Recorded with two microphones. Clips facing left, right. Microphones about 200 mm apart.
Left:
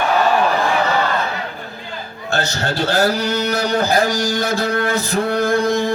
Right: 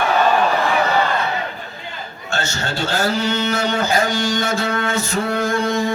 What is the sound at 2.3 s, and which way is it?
Speech, 35° left (ahead or behind).